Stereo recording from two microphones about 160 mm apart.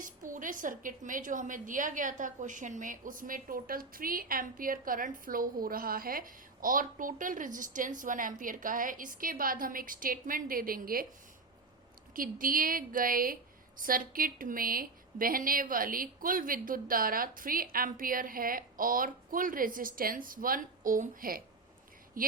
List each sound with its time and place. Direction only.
0.0 s a woman's voice: 55° right (ahead or behind)
12.1 s a woman's voice: 60° right (ahead or behind)